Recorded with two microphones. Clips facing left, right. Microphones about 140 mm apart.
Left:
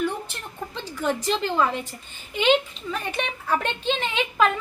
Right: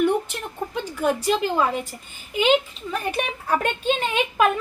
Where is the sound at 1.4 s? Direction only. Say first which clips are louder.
Right 1 dB; 10° right (ahead or behind).